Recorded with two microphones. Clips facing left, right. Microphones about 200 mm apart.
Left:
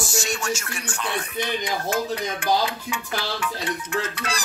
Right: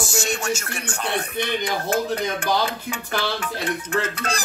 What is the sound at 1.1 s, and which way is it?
Speech, 60° right (ahead or behind).